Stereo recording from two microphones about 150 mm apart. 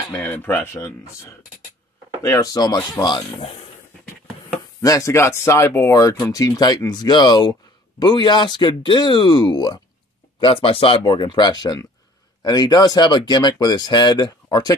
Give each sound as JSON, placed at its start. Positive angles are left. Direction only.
{"t": 0.1, "sound": "speech", "side_deg": 15}
{"t": 2.2, "sound": "speech", "side_deg": 25}
{"t": 4.8, "sound": "speech", "side_deg": 20}